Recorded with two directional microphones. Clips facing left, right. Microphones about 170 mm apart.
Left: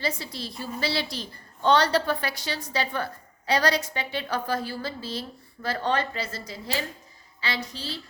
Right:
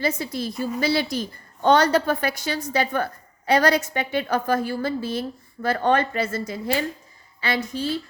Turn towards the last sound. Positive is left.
turn(degrees=-50)  # may be behind; listen again after turning